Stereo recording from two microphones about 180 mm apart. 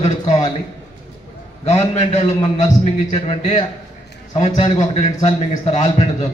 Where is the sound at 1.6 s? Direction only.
35° left (ahead or behind).